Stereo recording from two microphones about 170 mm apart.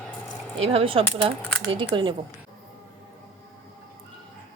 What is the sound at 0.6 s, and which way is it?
Speech, 35° right (ahead or behind).